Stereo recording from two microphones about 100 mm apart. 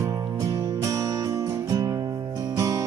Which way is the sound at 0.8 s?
35° right (ahead or behind).